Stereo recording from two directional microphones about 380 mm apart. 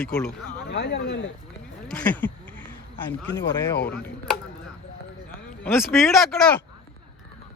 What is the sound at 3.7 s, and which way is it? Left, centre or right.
Speech, left.